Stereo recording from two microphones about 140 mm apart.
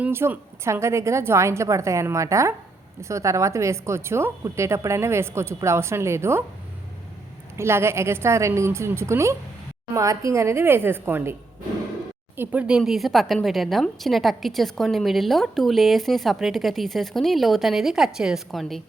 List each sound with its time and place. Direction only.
0.0 s a woman's voice: 15° right (ahead or behind)
7.5 s a woman's voice: 20° right (ahead or behind)
12.4 s a woman's voice: 10° right (ahead or behind)